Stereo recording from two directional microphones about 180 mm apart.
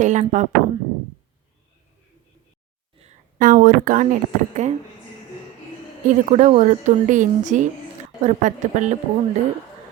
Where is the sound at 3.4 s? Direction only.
50° right (ahead or behind).